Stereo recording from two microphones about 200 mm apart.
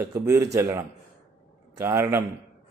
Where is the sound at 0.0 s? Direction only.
15° right (ahead or behind).